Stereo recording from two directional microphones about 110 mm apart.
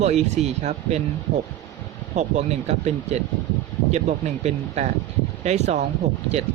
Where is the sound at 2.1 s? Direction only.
90° right.